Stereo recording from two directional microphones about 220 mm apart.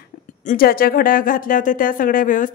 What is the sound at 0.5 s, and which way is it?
A woman's voice, 40° left (ahead or behind).